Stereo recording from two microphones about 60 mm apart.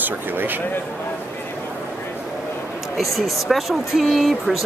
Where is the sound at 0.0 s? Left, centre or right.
Right.